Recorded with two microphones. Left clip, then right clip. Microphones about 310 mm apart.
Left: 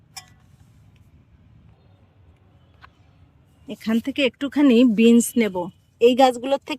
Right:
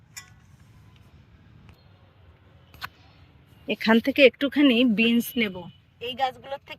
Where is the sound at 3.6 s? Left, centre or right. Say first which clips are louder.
Right 5 dB; centre.